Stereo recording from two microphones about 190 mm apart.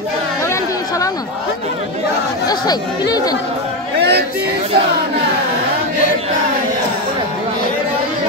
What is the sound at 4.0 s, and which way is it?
Music, 55° right (ahead or behind).